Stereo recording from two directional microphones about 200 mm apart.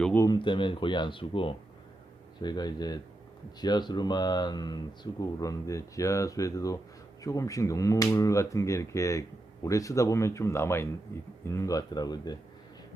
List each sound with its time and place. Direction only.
0.0 s speech: 10° left (ahead or behind)
0.3 s speech: 25° left (ahead or behind)